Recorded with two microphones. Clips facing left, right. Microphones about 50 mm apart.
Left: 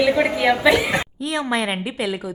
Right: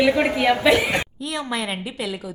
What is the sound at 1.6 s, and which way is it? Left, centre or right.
Speech, left.